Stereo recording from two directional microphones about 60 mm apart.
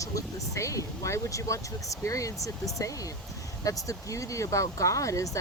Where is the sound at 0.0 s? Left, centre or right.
Left.